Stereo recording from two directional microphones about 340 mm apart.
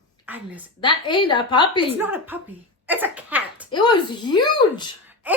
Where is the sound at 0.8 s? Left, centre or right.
Centre.